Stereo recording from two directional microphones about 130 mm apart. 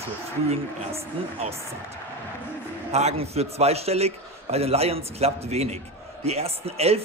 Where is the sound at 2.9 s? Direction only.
55° right (ahead or behind).